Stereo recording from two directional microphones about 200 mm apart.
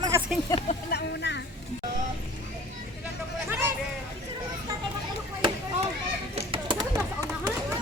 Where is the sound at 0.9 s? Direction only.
60° left (ahead or behind).